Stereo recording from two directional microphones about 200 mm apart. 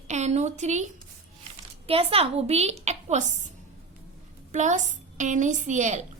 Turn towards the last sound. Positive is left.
turn(degrees=-35)  # may be behind; listen again after turning